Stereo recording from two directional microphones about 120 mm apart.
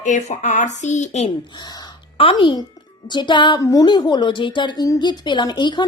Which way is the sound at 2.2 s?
45° left (ahead or behind).